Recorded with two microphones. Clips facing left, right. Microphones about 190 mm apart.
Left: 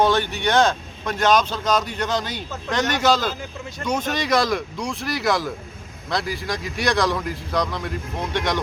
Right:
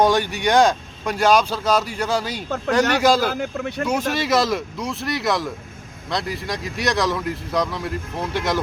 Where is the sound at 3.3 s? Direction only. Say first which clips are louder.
Right 6 dB; 65° right (ahead or behind).